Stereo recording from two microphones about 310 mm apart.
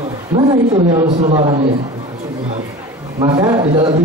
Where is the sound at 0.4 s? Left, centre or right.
Centre.